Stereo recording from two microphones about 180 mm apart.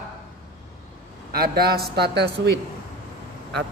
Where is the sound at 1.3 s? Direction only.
60° right (ahead or behind).